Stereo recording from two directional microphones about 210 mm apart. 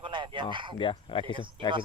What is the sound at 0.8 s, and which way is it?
Speech, 25° left (ahead or behind).